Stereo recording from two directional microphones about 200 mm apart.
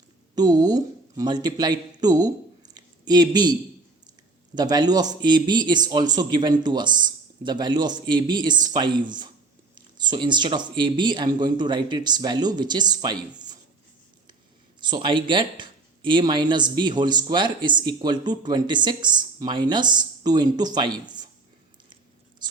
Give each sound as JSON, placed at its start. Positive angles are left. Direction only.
{"t": 0.3, "sound": "speech", "side_deg": -20}
{"t": 2.7, "sound": "a sound", "side_deg": -20}
{"t": 4.5, "sound": "speech", "side_deg": -20}
{"t": 14.8, "sound": "speech", "side_deg": -20}